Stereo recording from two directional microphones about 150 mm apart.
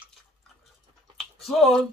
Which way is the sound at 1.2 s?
Centre (ahead or behind).